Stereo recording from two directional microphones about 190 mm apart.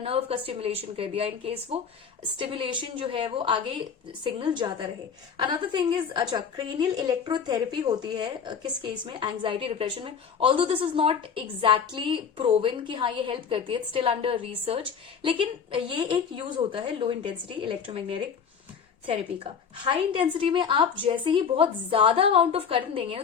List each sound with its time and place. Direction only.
0.0 s a woman's voice: 30° right (ahead or behind)
19.8 s a woman's voice: 25° right (ahead or behind)